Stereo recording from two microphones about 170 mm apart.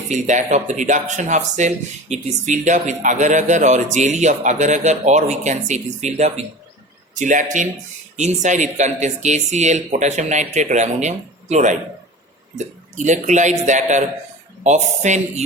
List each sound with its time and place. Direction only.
0.1 s speech: 45° right (ahead or behind)